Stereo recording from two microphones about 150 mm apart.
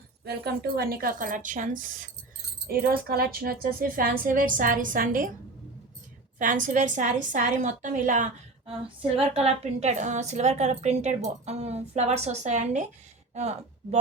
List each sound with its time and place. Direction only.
0.3 s a woman's voice: 90° right; by 2.0 s 65° right (ahead or behind)
2.6 s speech: 90° right; by 5.3 s 65° right (ahead or behind)
6.4 s a woman's voice: 60° right (ahead or behind)
8.6 s a woman's voice: 40° right (ahead or behind)